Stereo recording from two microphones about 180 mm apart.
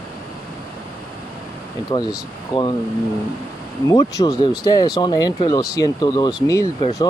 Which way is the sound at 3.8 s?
20° left (ahead or behind).